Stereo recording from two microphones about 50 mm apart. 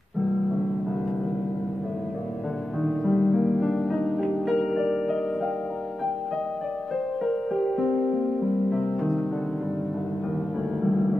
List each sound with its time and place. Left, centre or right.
3.1 s music: centre
7.6 s music: centre
8.7 s music: centre